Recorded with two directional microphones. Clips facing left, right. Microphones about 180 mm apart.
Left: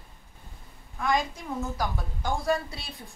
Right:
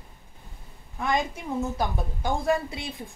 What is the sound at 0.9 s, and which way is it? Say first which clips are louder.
A woman's voice: even; 20° right (ahead or behind).